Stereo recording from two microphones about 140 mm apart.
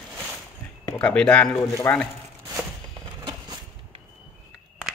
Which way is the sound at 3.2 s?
35° right (ahead or behind).